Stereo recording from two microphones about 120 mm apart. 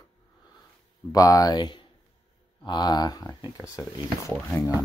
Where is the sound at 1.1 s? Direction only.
30° left (ahead or behind).